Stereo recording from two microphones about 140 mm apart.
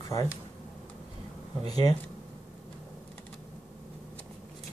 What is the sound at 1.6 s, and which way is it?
Speech, 30° left (ahead or behind).